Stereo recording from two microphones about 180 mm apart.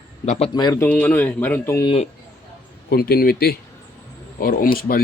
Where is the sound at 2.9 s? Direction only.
55° left (ahead or behind).